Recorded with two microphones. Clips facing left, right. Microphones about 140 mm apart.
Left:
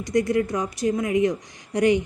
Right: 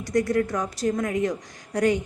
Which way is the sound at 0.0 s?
15° left (ahead or behind).